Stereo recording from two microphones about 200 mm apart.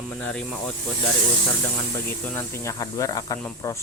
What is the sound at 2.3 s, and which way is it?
Speech, 15° left (ahead or behind).